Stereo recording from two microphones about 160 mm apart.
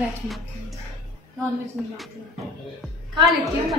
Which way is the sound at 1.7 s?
Centre (ahead or behind).